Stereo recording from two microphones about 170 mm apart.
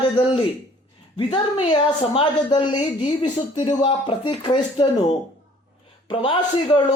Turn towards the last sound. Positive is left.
turn(degrees=30)  # may be behind; listen again after turning